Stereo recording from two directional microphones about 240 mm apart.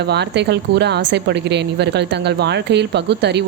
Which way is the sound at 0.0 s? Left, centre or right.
Right.